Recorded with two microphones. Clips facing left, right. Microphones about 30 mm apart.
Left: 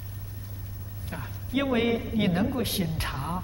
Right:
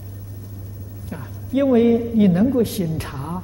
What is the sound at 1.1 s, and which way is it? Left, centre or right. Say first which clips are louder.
A man's voice: right 7 dB; left.